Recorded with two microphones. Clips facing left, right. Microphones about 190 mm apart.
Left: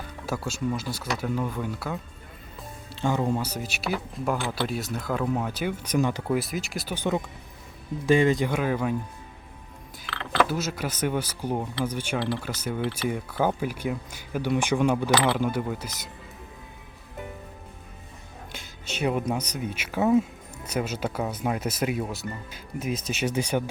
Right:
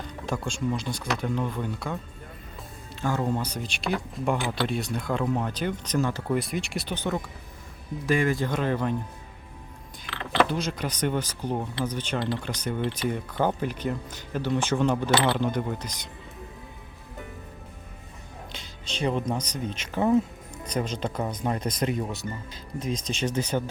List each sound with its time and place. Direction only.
0.0 s speech: 5° left (ahead or behind)
2.9 s speech: 20° left (ahead or behind)
6.3 s speech: centre (ahead or behind)
8.0 s speech: 25° left (ahead or behind)
8.4 s speech: 10° left (ahead or behind)
10.4 s speech: 5° left (ahead or behind)
18.5 s speech: 10° left (ahead or behind)